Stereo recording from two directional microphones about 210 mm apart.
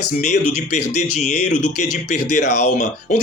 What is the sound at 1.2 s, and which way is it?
Speech, 35° left (ahead or behind).